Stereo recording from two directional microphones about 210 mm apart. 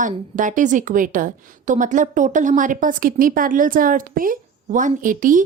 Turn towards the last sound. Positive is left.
turn(degrees=-40)  # may be behind; listen again after turning